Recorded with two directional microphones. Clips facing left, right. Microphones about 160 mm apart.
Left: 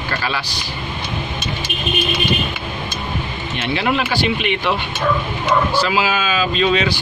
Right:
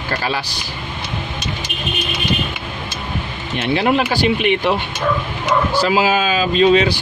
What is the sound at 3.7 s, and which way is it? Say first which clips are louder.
Speech: right 3 dB; 40° right (ahead or behind).